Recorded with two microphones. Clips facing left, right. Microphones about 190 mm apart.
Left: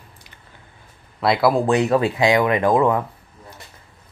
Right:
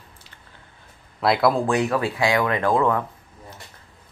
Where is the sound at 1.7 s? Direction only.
25° left (ahead or behind).